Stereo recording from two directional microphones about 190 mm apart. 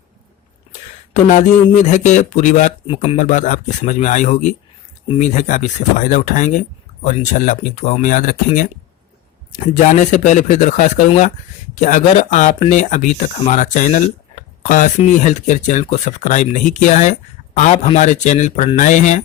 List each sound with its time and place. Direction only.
1.1 s speech: 40° left (ahead or behind)
2.8 s speech: 30° left (ahead or behind)